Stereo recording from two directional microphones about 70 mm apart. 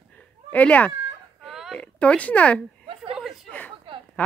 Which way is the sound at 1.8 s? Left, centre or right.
Centre.